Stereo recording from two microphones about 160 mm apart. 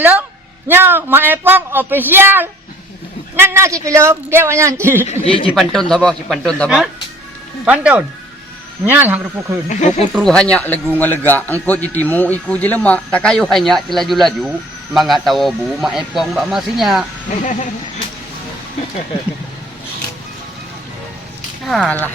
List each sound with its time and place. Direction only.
0.0 s speech: 10° right (ahead or behind)
5.0 s speech: 35° left (ahead or behind)
5.5 s speech: centre (ahead or behind)
9.6 s speech: 50° left (ahead or behind)
10.2 s a man's voice: 5° left (ahead or behind)
21.7 s a man's voice: 5° left (ahead or behind)